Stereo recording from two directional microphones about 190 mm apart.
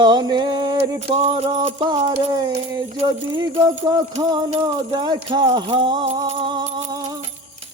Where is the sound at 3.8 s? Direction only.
20° right (ahead or behind).